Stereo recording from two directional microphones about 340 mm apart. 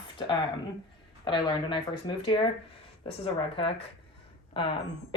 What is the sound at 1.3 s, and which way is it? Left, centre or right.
Speech, centre.